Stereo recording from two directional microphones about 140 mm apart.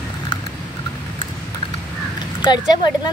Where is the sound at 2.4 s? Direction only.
30° left (ahead or behind).